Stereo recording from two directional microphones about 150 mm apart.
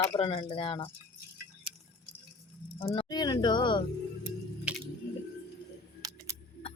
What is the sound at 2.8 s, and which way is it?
Speech, 35° left (ahead or behind).